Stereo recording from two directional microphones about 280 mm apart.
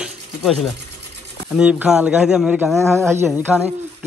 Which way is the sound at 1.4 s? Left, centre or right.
Centre.